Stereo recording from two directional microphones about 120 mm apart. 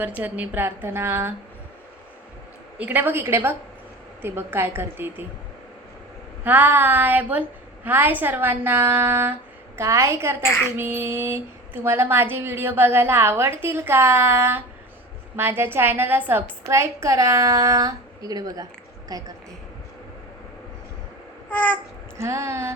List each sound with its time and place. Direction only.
0.2 s speech: 15° right (ahead or behind)
2.7 s a woman's voice: 15° right (ahead or behind)
6.4 s a woman's voice: 15° right (ahead or behind)
10.4 s speech: 20° left (ahead or behind)
10.8 s speech: 20° right (ahead or behind)
21.5 s a sound: 15° left (ahead or behind)
22.2 s speech: 25° right (ahead or behind)